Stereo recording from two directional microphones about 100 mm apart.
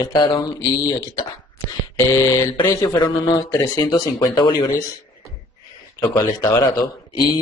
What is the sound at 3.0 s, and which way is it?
Speech, 40° left (ahead or behind).